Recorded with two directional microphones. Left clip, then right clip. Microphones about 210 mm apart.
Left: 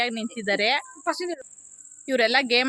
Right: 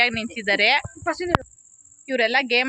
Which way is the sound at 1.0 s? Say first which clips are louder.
Right 5 dB; 20° right (ahead or behind).